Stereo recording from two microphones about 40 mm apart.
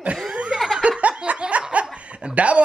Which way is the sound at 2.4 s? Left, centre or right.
Right.